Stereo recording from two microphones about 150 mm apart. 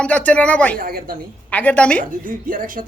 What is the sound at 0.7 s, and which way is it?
Speech, 80° right.